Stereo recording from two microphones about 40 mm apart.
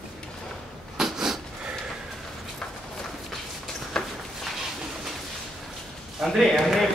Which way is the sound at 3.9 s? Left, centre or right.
Centre.